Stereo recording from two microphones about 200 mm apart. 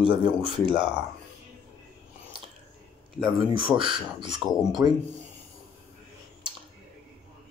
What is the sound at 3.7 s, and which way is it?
Speech, 25° right (ahead or behind).